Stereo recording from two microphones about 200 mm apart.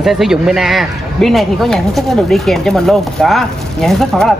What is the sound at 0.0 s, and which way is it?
Speech, centre (ahead or behind).